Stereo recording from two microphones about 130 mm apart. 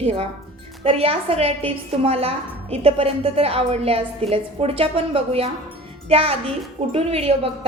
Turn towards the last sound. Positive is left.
turn(degrees=-50)  # may be behind; listen again after turning